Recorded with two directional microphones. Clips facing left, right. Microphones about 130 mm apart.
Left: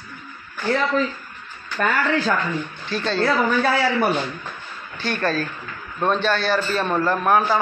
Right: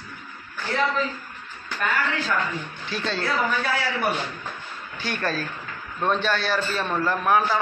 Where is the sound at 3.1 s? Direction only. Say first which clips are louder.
Left 6 dB; 50° left (ahead or behind).